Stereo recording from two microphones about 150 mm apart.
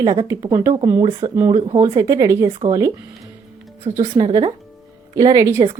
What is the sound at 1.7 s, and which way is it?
Speech, 20° right (ahead or behind).